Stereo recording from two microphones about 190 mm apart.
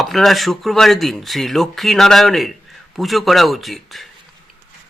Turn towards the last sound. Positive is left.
turn(degrees=0)  # may be behind; listen again after turning